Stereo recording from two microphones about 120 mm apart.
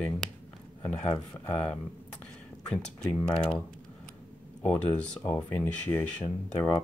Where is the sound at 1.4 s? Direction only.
15° left (ahead or behind).